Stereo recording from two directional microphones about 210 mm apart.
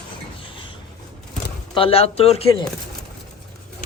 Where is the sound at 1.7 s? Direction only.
25° left (ahead or behind).